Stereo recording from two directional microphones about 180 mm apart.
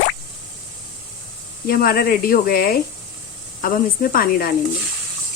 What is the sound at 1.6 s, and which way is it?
Speech, 55° left (ahead or behind).